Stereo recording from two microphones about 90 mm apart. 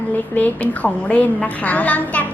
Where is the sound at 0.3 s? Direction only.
20° left (ahead or behind).